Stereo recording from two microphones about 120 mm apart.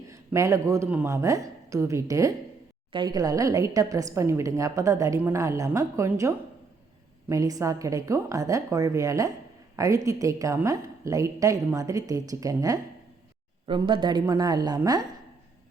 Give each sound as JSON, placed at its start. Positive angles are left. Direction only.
{"t": 0.1, "sound": "a man's voice", "side_deg": -25}
{"t": 13.7, "sound": "speech", "side_deg": -45}